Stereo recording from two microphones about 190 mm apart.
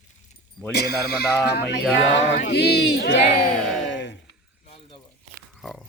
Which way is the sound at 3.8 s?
70° left (ahead or behind).